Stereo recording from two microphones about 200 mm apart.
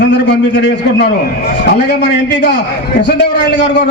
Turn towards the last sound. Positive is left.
turn(degrees=60)  # may be behind; listen again after turning